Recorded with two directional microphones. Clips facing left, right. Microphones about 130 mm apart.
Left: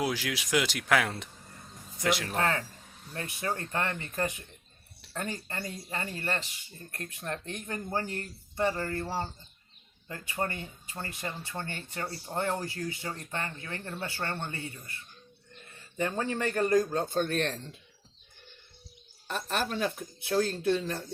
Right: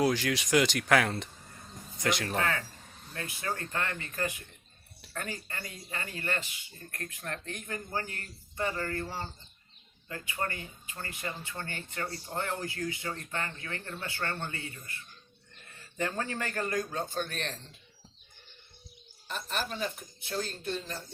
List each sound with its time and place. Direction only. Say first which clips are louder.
0.0 s speech: right 4 dB; 5° left (ahead or behind)
3.1 s speech: left 2 dB; 25° left (ahead or behind)
5.1 s speech: left 3 dB; 30° left (ahead or behind)
6.9 s speech: left 2 dB; 20° left (ahead or behind)
16.0 s speech: left 3 dB; 20° left (ahead or behind)
16.9 s speech: left 6 dB; 50° left (ahead or behind)
19.3 s speech: left 4 dB; 55° left (ahead or behind)